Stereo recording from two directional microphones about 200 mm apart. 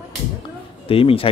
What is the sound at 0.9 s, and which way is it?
Speech, 25° left (ahead or behind).